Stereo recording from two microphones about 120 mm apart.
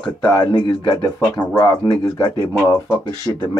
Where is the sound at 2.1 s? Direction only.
25° left (ahead or behind).